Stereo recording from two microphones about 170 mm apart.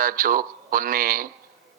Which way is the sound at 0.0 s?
55° right (ahead or behind).